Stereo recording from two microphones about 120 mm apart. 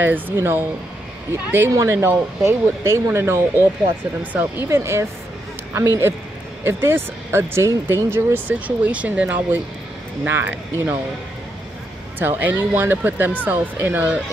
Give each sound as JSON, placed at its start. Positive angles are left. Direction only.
{"t": 0.0, "sound": "speech", "side_deg": -15}
{"t": 12.2, "sound": "speech", "side_deg": -15}